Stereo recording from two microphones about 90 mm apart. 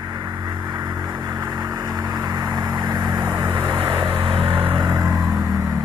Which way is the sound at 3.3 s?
40° right (ahead or behind).